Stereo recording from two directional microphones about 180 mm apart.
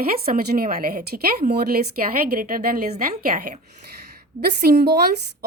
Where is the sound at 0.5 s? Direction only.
55° right (ahead or behind).